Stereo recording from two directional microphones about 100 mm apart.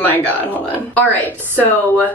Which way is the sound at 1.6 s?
20° left (ahead or behind).